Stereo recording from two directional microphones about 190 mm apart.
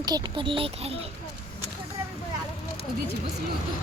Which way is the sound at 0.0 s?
25° right (ahead or behind).